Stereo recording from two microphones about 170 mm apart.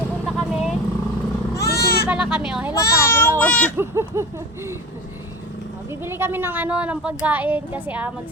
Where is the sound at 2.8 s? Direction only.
15° left (ahead or behind).